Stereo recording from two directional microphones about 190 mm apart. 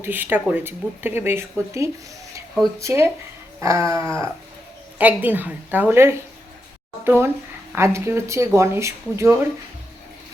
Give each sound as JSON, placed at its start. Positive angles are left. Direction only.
{"t": 0.0, "sound": "speech", "side_deg": -10}